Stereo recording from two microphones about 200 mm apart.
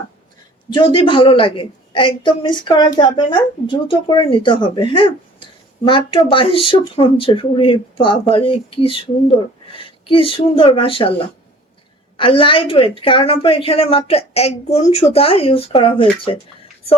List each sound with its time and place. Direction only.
0.7 s a woman's voice: 25° left (ahead or behind)
12.1 s a woman's voice: 25° left (ahead or behind)